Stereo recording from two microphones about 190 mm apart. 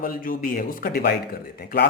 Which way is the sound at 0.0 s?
50° left (ahead or behind).